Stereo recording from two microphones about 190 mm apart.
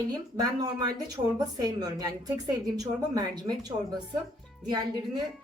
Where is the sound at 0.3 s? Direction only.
20° right (ahead or behind).